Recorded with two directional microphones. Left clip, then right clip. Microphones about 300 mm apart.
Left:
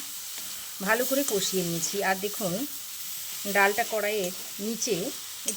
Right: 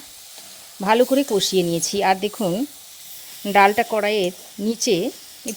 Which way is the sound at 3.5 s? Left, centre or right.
Right.